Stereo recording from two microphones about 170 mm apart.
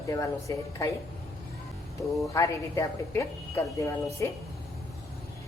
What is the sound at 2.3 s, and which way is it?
A woman's voice, 15° left (ahead or behind).